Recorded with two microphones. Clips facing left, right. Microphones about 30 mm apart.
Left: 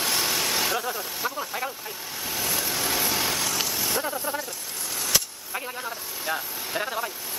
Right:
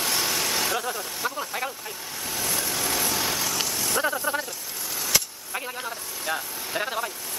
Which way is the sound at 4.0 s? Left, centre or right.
Centre.